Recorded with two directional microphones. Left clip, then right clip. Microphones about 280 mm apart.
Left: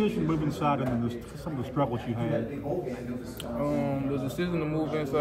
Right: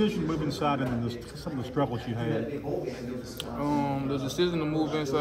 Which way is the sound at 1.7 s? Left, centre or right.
Right.